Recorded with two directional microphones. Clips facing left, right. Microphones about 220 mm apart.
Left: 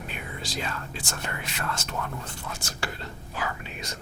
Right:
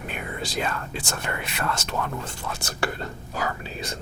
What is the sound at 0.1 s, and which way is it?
Speech, 55° right (ahead or behind).